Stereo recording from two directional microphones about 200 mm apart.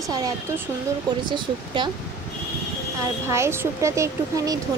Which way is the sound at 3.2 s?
15° right (ahead or behind).